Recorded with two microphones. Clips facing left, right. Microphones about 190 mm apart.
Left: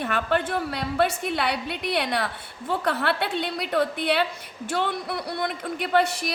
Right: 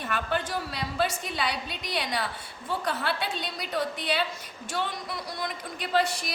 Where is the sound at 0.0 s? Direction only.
60° left (ahead or behind).